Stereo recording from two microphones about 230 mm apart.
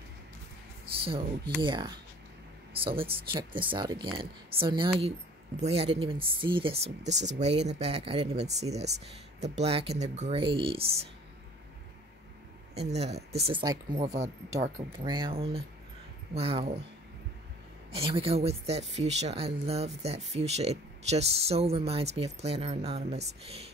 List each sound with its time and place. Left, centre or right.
0.9 s speech: right
12.7 s speech: right
17.9 s speech: right